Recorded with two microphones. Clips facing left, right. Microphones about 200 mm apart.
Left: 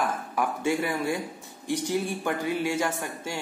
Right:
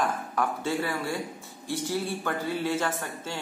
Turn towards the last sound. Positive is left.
turn(degrees=10)  # may be behind; listen again after turning